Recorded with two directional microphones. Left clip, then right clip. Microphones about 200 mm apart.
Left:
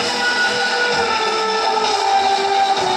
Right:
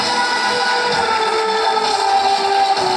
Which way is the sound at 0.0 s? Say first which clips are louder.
Right 1 dB; centre (ahead or behind).